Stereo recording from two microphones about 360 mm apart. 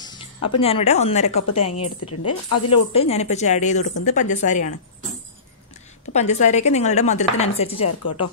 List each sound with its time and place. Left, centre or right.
0.0 s a sound: centre
0.5 s speech: centre
1.4 s a woman's voice: left
2.7 s speech: centre
6.1 s speech: centre
8.0 s a woman's voice: left